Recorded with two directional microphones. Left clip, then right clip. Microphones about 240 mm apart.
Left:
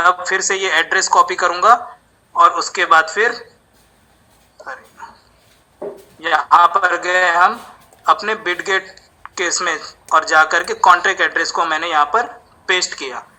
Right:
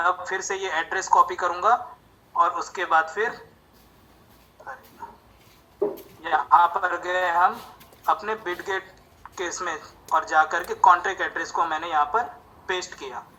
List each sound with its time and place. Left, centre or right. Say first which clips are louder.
0.0 s speech: left 10 dB; left
4.5 s a sound: left 8 dB; left
6.2 s speech: left 7 dB; left